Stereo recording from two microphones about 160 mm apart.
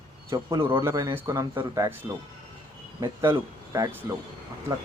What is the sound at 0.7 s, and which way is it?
A man's voice, 15° right (ahead or behind).